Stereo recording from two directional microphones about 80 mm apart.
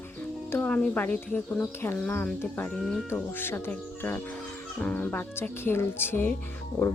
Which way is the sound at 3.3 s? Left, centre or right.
Left.